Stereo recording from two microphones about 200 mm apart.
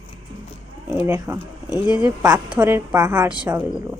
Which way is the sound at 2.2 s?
20° right (ahead or behind).